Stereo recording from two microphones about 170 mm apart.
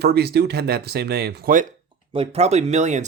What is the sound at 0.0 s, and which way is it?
Speech, 70° right (ahead or behind).